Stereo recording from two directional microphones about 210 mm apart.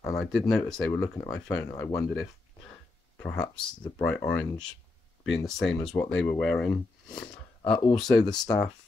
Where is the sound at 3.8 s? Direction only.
10° left (ahead or behind).